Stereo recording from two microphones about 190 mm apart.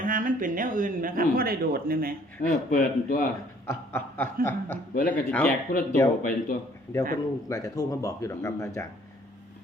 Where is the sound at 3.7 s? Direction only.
10° left (ahead or behind).